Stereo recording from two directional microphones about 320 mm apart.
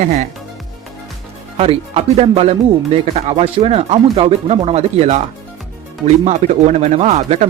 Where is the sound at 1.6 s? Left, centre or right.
Centre.